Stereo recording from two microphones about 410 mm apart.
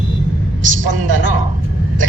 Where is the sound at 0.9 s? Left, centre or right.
Right.